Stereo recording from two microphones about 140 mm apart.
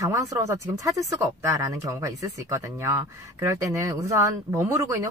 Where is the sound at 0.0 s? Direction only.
25° right (ahead or behind).